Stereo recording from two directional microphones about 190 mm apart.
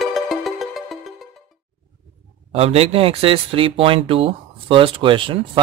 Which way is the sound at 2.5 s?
30° right (ahead or behind).